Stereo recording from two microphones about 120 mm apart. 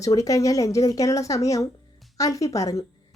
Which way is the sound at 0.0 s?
30° left (ahead or behind).